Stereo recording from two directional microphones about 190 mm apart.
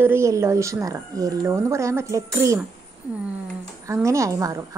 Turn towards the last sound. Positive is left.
turn(degrees=-15)  # may be behind; listen again after turning